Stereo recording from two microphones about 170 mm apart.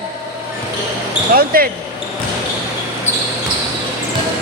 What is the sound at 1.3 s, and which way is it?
Speech, 60° right (ahead or behind).